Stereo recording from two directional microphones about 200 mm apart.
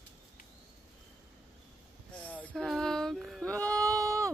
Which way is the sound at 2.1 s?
5° left (ahead or behind).